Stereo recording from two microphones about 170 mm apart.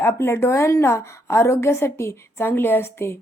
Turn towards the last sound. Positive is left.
turn(degrees=15)  # may be behind; listen again after turning